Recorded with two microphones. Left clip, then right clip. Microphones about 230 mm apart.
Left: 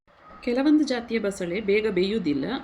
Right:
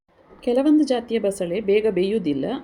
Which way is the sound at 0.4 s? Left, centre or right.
Centre.